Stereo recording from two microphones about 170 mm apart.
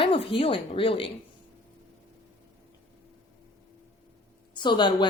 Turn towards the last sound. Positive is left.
turn(degrees=25)  # may be behind; listen again after turning